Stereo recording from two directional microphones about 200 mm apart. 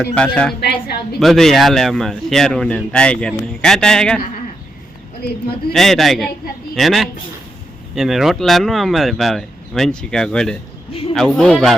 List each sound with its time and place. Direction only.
0.0 s speech: 5° left (ahead or behind)
0.6 s a woman's voice: 55° left (ahead or behind)
1.2 s speech: centre (ahead or behind)
5.7 s speech: centre (ahead or behind)